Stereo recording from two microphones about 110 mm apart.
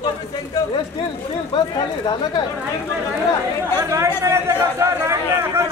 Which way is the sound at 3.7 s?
25° right (ahead or behind).